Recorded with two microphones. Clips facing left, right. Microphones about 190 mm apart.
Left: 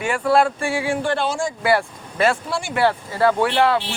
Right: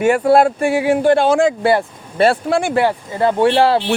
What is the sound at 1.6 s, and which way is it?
Speech, 30° right (ahead or behind).